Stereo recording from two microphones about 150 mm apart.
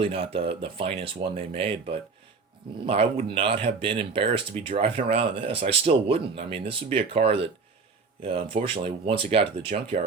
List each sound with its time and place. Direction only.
0.0 s speech: 40° right (ahead or behind)